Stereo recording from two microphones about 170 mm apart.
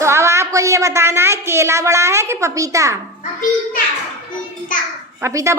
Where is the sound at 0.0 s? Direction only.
15° right (ahead or behind).